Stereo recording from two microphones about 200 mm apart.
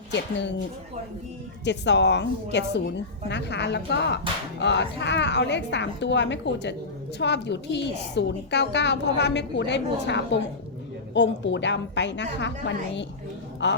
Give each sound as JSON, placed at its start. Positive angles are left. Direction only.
{"t": 0.1, "sound": "a woman's voice", "side_deg": 60}
{"t": 1.6, "sound": "a woman's voice", "side_deg": 60}